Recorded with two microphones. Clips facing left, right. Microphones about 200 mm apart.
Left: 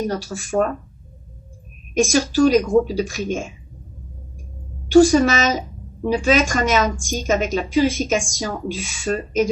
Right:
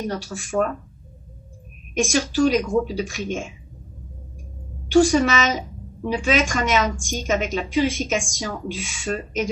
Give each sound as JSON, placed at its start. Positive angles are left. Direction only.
{"t": 0.0, "sound": "a woman's voice", "side_deg": 40}
{"t": 2.0, "sound": "a woman's voice", "side_deg": 40}
{"t": 4.9, "sound": "a woman's voice", "side_deg": 40}